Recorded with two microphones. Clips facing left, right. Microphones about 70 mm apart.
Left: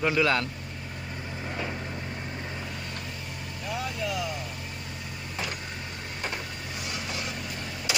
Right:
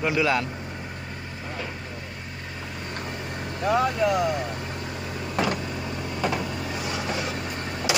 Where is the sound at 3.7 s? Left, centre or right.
Right.